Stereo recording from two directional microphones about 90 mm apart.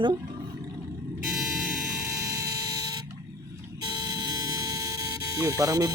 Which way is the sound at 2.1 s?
35° right (ahead or behind).